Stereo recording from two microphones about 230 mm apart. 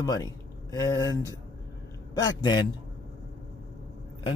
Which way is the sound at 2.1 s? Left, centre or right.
Centre.